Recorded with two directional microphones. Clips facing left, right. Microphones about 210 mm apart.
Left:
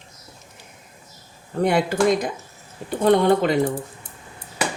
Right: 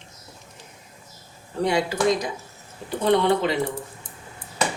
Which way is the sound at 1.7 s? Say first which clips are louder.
Left 3 dB; 55° left (ahead or behind).